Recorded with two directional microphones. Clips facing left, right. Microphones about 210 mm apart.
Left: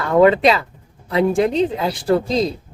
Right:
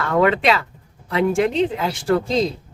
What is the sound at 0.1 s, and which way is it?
Speech, 35° left (ahead or behind).